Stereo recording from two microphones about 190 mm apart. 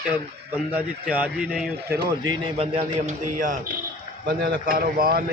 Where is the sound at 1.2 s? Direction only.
5° right (ahead or behind).